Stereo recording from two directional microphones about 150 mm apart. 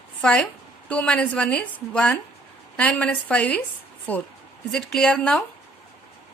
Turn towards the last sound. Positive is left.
turn(degrees=5)  # may be behind; listen again after turning